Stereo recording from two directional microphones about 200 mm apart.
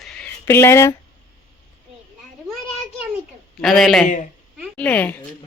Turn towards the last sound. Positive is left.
turn(degrees=5)  # may be behind; listen again after turning